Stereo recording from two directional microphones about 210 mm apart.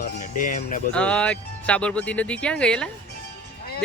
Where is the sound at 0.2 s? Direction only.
40° left (ahead or behind).